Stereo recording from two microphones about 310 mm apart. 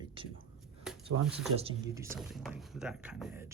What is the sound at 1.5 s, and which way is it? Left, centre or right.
Speech, centre.